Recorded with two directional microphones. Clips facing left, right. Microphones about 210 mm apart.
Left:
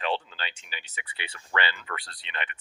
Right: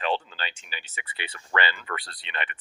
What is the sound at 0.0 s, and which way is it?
Speech, 40° right (ahead or behind).